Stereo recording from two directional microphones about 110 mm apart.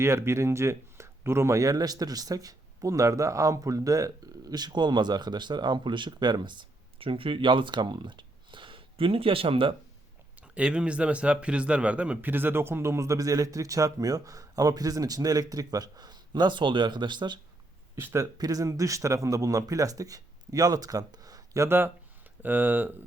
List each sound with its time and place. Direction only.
0.0 s speech: 25° right (ahead or behind); by 9.7 s 55° right (ahead or behind)
10.4 s speech: 10° right (ahead or behind); by 17.4 s 45° right (ahead or behind)
17.9 s speech: 25° right (ahead or behind)